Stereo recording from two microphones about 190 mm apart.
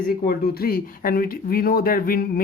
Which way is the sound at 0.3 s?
55° left (ahead or behind).